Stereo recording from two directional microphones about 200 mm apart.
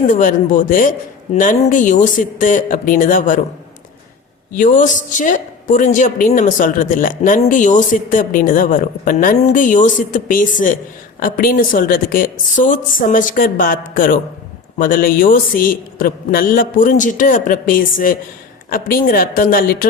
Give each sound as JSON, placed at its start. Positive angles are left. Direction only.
{"t": 0.1, "sound": "a woman's voice", "side_deg": 40}
{"t": 4.5, "sound": "a woman's voice", "side_deg": 40}